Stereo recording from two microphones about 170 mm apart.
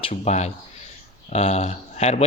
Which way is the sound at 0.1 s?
40° left (ahead or behind).